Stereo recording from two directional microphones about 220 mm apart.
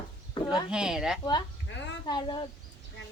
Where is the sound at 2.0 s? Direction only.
20° left (ahead or behind).